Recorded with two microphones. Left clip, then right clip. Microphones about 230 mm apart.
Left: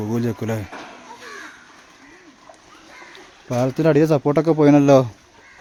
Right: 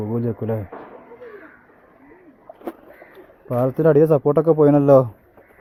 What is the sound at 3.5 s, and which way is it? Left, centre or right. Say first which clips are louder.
Speech: right 1 dB; centre.